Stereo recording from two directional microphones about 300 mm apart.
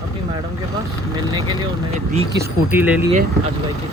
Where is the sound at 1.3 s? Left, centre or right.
Centre.